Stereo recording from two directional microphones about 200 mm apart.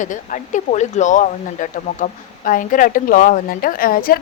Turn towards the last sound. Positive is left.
turn(degrees=45)  # may be behind; listen again after turning